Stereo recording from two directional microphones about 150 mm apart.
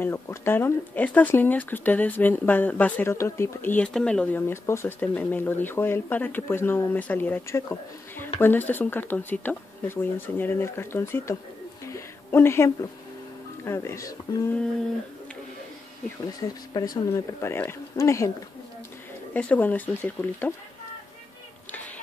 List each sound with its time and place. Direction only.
0.0 s speech: 15° left (ahead or behind)
11.8 s a sound: 20° left (ahead or behind)
13.7 s speech: 20° left (ahead or behind)
16.3 s speech: 25° left (ahead or behind)
19.3 s speech: 10° left (ahead or behind)
21.7 s a sound: 10° left (ahead or behind)